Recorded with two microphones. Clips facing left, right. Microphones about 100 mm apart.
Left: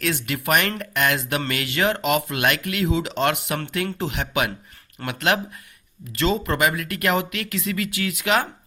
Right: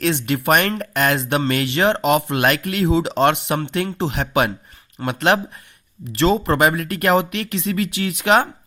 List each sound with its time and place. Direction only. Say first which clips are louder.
0.0 s speech: right 5 dB; 30° right (ahead or behind)